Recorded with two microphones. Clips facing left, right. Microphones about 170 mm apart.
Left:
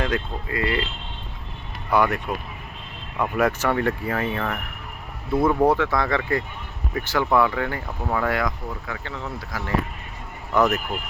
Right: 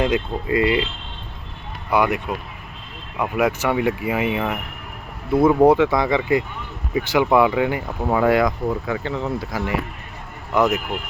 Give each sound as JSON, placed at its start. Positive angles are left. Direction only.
{"t": 0.0, "sound": "speech", "side_deg": -20}
{"t": 1.9, "sound": "speech", "side_deg": -15}